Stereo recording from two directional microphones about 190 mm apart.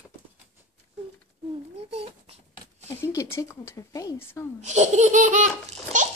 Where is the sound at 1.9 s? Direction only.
30° right (ahead or behind).